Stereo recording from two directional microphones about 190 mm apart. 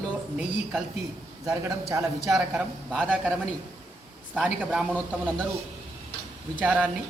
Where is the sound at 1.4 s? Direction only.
15° right (ahead or behind).